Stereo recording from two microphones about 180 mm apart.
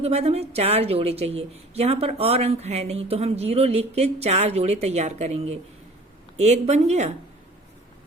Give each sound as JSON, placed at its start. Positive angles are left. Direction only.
{"t": 0.0, "sound": "a woman's voice", "side_deg": -35}